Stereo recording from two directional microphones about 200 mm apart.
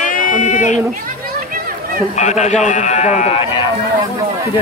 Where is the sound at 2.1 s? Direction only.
35° left (ahead or behind).